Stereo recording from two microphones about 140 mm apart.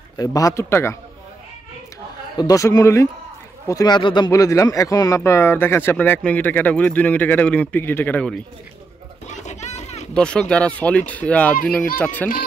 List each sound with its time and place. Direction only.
0.2 s a man's voice: 25° left (ahead or behind)
2.3 s a man's voice: 25° left (ahead or behind); by 8.4 s 10° left (ahead or behind)
9.3 s a sound: 55° left (ahead or behind)
10.1 s speech: 5° left (ahead or behind)